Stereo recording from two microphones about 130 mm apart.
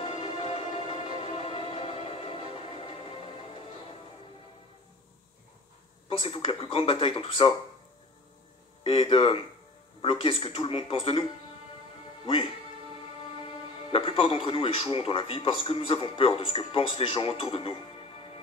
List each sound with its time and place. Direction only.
0.1 s music: 50° left (ahead or behind)
0.8 s music: 45° right (ahead or behind)
1.3 s music: 45° left (ahead or behind)
6.0 s speech: 45° left (ahead or behind)
8.8 s speech: 50° left (ahead or behind)
13.4 s speech: 45° left (ahead or behind)